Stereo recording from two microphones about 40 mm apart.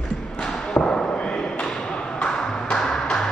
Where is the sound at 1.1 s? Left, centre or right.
Centre.